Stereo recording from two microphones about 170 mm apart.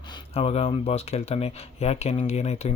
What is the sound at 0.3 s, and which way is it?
Speech, 35° left (ahead or behind).